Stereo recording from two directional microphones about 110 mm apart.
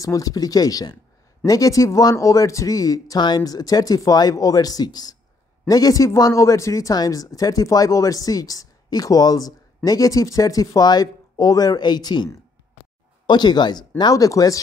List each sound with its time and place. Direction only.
0.0 s speech: 30° left (ahead or behind)